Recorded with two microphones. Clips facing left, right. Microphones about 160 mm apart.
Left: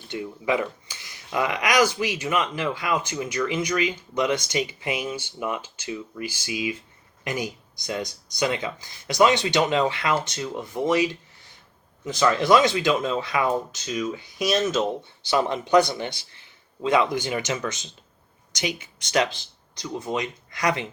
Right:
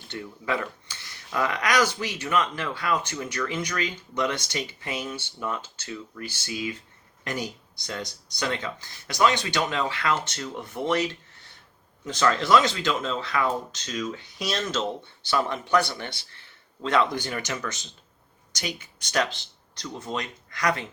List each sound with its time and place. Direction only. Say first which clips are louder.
0.1 s speech: left 5 dB; 15° left (ahead or behind)
19.7 s speech: left 4 dB; 15° left (ahead or behind)